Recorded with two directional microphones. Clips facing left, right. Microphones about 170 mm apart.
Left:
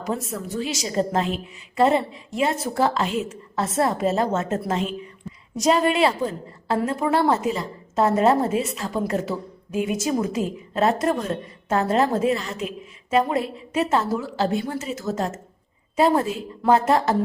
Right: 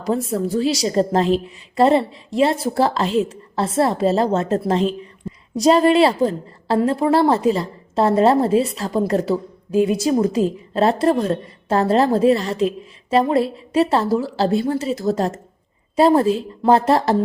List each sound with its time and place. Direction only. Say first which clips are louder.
0.0 s a woman's voice: right 7 dB; 30° right (ahead or behind)